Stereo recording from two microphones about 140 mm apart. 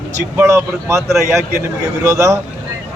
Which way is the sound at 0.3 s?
20° right (ahead or behind).